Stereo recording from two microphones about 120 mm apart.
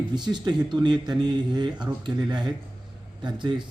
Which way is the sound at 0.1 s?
40° right (ahead or behind).